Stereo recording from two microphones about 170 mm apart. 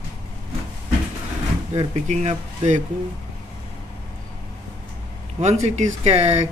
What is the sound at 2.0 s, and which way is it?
Speech, 40° right (ahead or behind).